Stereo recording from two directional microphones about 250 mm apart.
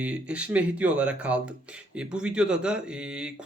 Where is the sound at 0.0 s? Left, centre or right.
Centre.